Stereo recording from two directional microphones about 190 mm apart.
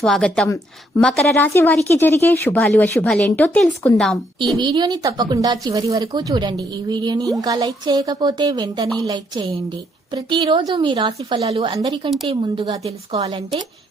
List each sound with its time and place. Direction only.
0.0 s a woman's voice: 5° left (ahead or behind)
4.5 s a woman's voice: 25° right (ahead or behind)